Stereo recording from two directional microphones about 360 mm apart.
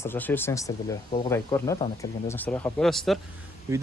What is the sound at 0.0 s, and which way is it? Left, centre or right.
Speech, centre.